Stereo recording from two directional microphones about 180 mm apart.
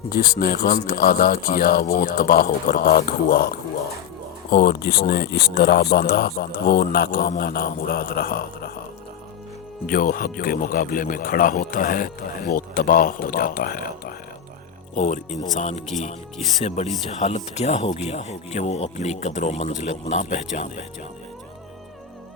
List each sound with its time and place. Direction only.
0.1 s speech: 55° left (ahead or behind)
4.5 s speech: 65° left (ahead or behind)
9.8 s speech: 50° left (ahead or behind)
14.9 s speech: 40° left (ahead or behind)